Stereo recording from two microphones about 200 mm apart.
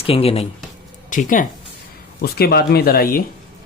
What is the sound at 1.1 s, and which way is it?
Speech, 40° left (ahead or behind).